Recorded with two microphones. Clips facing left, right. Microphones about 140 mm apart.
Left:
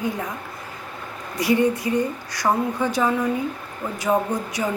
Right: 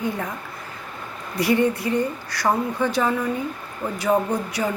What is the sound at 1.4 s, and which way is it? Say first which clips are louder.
Speech: even; 15° left (ahead or behind).